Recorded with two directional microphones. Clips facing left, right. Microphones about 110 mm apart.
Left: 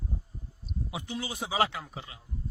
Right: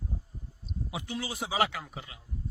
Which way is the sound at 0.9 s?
25° left (ahead or behind).